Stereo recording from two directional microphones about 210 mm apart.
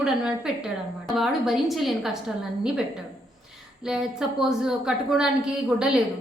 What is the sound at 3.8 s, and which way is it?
A woman's voice, 5° right (ahead or behind).